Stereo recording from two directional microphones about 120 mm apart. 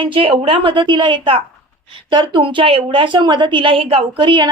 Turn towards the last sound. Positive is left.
turn(degrees=-40)  # may be behind; listen again after turning